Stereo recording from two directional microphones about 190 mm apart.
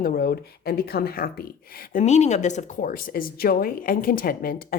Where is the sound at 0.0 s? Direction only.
50° left (ahead or behind).